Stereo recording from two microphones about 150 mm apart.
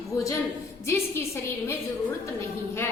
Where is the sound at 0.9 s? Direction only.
15° left (ahead or behind).